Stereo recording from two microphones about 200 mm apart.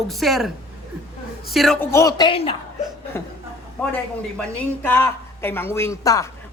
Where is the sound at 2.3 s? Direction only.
25° left (ahead or behind).